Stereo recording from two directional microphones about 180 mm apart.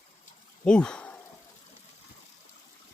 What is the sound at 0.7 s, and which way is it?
Speech, 5° left (ahead or behind).